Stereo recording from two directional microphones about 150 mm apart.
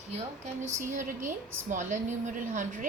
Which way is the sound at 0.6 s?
55° right (ahead or behind).